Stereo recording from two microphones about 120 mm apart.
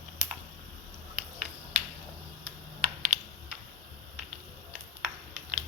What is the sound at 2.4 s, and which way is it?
Computer keyboard, 5° right (ahead or behind).